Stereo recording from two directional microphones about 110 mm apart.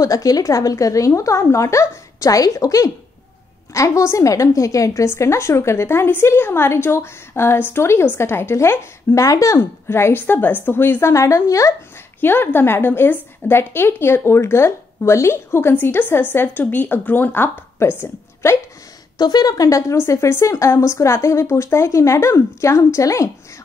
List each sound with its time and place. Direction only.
0.0 s a woman's voice: 35° left (ahead or behind)
12.2 s a woman's voice: 20° left (ahead or behind)
19.1 s a woman's voice: 40° left (ahead or behind)